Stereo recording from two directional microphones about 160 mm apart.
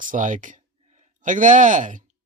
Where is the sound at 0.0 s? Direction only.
55° right (ahead or behind).